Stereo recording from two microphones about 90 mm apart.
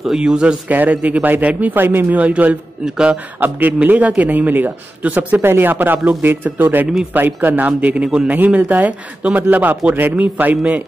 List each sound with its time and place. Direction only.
0.0 s a man's voice: 5° right (ahead or behind)